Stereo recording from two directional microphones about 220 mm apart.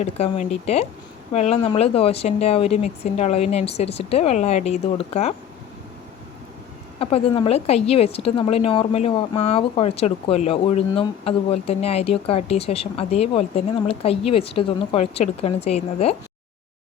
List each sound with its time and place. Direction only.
0.0 s a woman's voice: 30° left (ahead or behind)
7.0 s a woman's voice: 25° left (ahead or behind)